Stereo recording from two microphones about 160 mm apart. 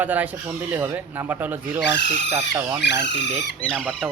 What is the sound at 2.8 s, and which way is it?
Speech, 90° left.